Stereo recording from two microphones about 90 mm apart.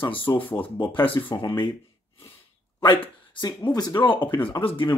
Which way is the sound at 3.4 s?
50° left (ahead or behind).